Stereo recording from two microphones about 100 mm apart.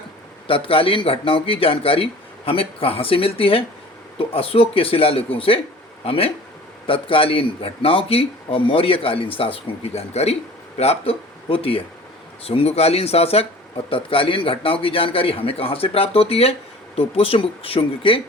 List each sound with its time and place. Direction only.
0.4 s a man's voice: 65° left (ahead or behind)
12.5 s speech: 85° left; by 18.2 s 65° left (ahead or behind)